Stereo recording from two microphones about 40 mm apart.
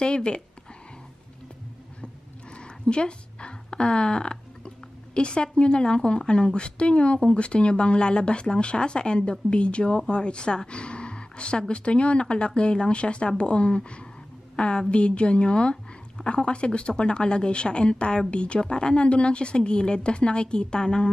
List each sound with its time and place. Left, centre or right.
0.0 s a woman's voice: left
2.5 s a woman's voice: left